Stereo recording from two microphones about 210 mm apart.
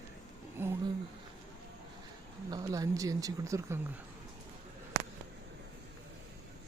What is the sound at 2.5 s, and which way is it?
Speech, 15° right (ahead or behind).